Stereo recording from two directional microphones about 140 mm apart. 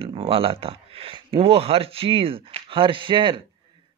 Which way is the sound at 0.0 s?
45° right (ahead or behind).